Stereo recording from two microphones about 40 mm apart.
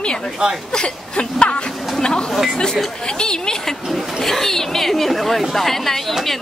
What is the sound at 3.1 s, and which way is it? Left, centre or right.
Speech, centre.